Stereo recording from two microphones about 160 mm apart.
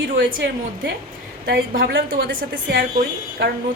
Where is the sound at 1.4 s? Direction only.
70° right (ahead or behind).